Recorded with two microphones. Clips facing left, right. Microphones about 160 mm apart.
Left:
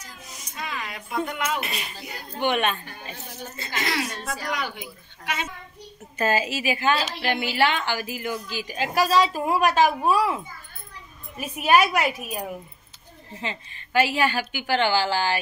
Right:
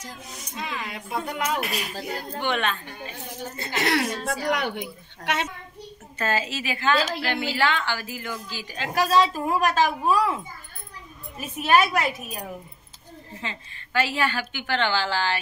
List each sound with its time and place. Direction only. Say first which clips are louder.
0.6 s speech: right 1 dB; 25° right (ahead or behind)
1.6 s speech: right 3 dB; centre (ahead or behind)
2.0 s speech: right 7 dB; 50° right (ahead or behind)
2.3 s a woman's voice: left 4 dB; 15° left (ahead or behind)
3.5 s a woman's voice: right 4 dB; 65° right (ahead or behind)
5.2 s a child's voice: right 3 dB; 75° right (ahead or behind)
6.1 s a woman's voice: left 3 dB; 15° left (ahead or behind)
11.3 s a woman's voice: left 1 dB; 10° left (ahead or behind)
13.4 s a woman's voice: left 4 dB; 15° left (ahead or behind)